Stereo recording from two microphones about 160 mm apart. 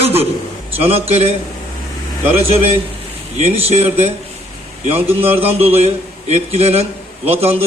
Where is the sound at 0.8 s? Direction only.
40° right (ahead or behind).